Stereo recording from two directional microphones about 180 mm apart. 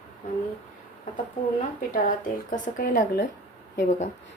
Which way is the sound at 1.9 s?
50° left (ahead or behind).